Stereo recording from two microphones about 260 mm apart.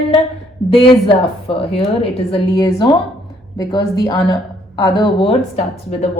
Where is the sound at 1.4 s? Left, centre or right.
Left.